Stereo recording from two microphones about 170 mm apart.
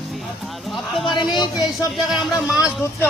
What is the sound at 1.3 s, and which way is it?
Speech, 25° left (ahead or behind).